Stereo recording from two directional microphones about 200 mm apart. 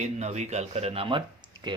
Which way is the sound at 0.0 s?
35° right (ahead or behind).